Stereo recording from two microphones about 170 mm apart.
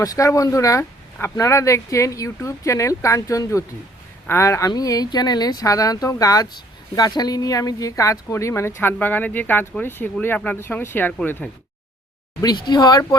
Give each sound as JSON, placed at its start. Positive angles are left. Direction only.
{"t": 0.0, "sound": "speech", "side_deg": 20}
{"t": 12.4, "sound": "speech", "side_deg": 25}